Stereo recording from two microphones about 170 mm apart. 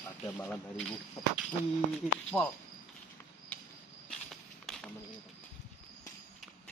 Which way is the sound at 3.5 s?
10° left (ahead or behind).